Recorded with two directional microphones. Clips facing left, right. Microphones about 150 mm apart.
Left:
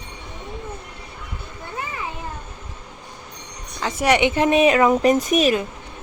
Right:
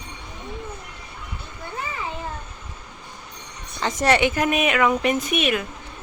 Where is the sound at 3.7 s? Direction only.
10° left (ahead or behind); by 5.6 s 35° left (ahead or behind).